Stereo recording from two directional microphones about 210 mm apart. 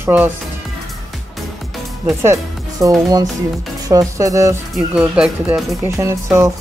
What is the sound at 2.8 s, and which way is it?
Speech, 15° right (ahead or behind).